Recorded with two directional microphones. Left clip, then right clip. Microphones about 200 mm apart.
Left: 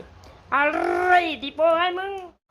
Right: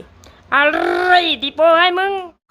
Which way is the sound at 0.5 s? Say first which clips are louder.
Right 7 dB; 10° right (ahead or behind).